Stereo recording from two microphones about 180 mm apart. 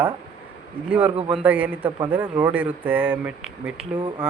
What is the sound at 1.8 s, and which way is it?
Speech, 25° right (ahead or behind).